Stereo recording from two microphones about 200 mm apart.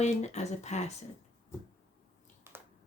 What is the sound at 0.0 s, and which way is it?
Speech, 35° left (ahead or behind).